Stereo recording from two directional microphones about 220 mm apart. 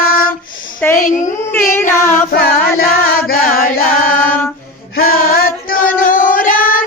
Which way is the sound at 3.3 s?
40° left (ahead or behind).